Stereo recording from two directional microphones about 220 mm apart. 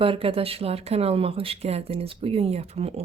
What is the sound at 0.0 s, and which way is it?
Speech, 25° right (ahead or behind).